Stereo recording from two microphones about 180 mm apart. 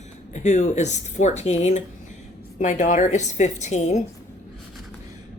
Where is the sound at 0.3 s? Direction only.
40° left (ahead or behind).